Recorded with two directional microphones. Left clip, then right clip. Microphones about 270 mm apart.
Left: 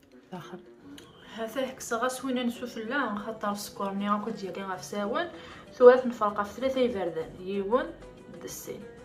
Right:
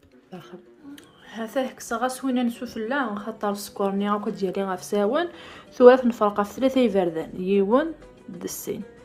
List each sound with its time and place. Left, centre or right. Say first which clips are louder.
1.3 s a woman's voice: right 5 dB; centre